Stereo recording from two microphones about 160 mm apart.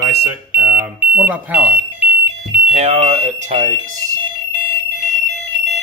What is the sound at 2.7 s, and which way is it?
Speech, 40° right (ahead or behind).